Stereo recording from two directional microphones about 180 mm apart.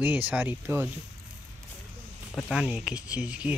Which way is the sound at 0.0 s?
10° right (ahead or behind).